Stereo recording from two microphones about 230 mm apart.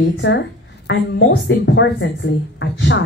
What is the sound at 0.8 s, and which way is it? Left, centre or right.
A woman's voice, left.